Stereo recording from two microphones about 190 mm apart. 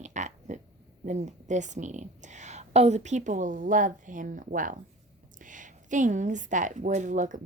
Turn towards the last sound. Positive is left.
turn(degrees=-40)  # may be behind; listen again after turning